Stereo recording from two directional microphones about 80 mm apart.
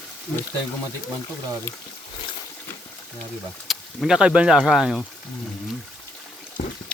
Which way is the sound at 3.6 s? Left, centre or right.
Centre.